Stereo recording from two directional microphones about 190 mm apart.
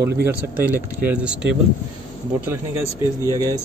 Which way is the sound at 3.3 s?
20° right (ahead or behind).